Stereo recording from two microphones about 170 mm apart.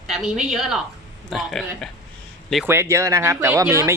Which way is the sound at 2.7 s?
15° right (ahead or behind).